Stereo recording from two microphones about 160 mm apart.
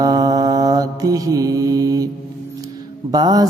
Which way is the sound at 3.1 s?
25° right (ahead or behind).